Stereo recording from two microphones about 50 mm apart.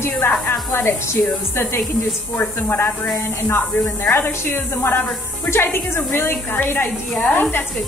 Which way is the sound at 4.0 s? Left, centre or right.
Left.